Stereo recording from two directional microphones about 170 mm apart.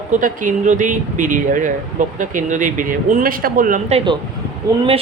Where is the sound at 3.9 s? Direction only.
30° right (ahead or behind).